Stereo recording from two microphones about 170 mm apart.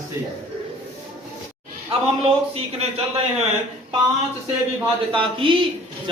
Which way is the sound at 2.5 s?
35° right (ahead or behind).